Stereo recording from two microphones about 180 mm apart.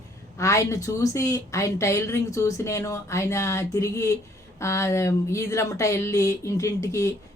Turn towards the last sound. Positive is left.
turn(degrees=15)  # may be behind; listen again after turning